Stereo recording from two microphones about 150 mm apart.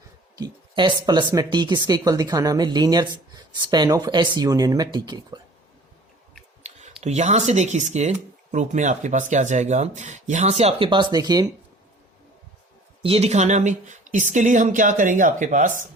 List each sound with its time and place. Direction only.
0.3 s speech: 30° right (ahead or behind)
6.6 s a sound: 45° right (ahead or behind)
7.0 s speech: 50° right (ahead or behind); by 11.4 s 25° right (ahead or behind)
13.0 s speech: 40° right (ahead or behind); by 15.9 s 55° right (ahead or behind)